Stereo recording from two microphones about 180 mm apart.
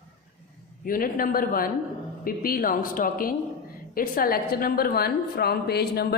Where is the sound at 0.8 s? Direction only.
50° left (ahead or behind).